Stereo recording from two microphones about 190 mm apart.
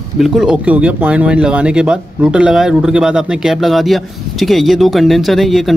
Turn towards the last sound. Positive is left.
turn(degrees=0)  # may be behind; listen again after turning